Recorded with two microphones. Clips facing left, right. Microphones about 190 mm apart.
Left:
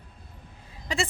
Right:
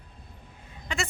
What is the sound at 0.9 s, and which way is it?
Speech, 35° left (ahead or behind).